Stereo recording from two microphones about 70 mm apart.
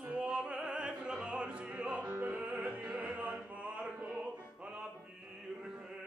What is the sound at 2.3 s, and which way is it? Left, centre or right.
Music, centre.